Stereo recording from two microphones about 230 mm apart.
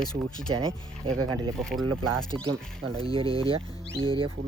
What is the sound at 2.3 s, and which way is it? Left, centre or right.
Speech, right.